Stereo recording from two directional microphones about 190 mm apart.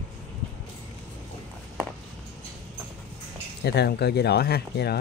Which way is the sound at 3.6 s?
60° left (ahead or behind).